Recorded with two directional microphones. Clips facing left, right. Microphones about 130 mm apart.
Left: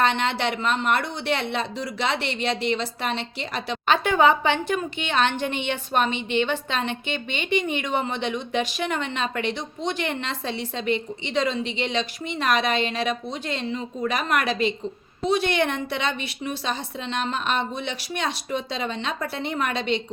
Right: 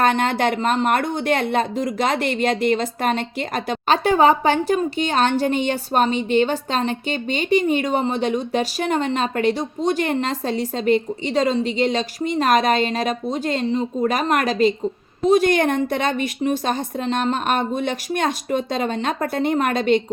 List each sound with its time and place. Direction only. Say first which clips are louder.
0.0 s a woman's voice: right 5 dB; 45° right (ahead or behind)